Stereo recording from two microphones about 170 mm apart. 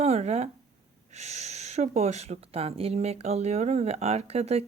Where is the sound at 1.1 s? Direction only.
40° right (ahead or behind).